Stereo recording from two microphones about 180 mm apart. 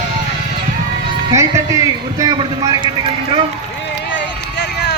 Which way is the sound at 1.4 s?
15° right (ahead or behind).